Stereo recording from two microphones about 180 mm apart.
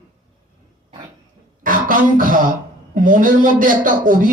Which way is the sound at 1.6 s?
50° right (ahead or behind).